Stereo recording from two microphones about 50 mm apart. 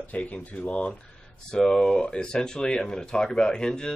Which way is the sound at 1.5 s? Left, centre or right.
Centre.